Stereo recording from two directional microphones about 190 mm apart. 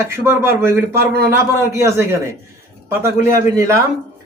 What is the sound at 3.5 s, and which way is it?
Speech, 15° right (ahead or behind).